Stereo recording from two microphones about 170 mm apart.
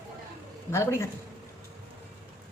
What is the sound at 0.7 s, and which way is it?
Speech, 15° left (ahead or behind).